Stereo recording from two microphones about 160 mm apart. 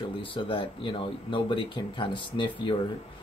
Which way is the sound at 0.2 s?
35° left (ahead or behind).